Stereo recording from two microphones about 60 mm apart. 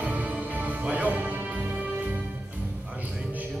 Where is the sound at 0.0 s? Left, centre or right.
Right.